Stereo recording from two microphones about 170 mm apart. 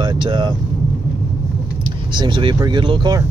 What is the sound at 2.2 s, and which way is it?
Speech, 25° right (ahead or behind).